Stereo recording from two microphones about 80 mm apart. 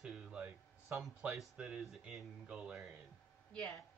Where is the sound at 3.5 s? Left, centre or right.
Centre.